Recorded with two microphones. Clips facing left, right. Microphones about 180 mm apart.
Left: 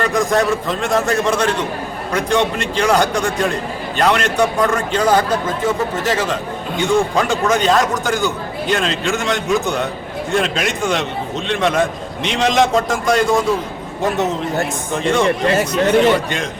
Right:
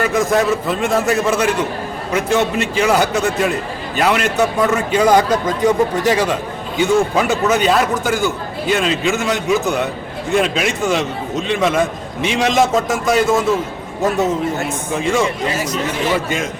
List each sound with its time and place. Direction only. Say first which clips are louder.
0.0 s a man's voice: right 1 dB; 5° right (ahead or behind)
14.9 s a man's voice: left 1 dB; centre (ahead or behind)
15.4 s speech: left 5 dB; 60° left (ahead or behind)